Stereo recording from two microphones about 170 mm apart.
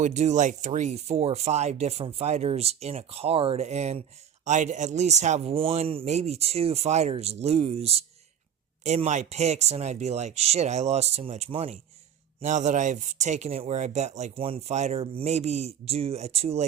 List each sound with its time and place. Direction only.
0.0 s speech: 45° right (ahead or behind)